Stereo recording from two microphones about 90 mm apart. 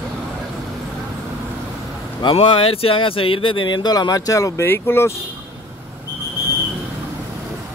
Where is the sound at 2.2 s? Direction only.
80° left; by 4.7 s 40° left (ahead or behind).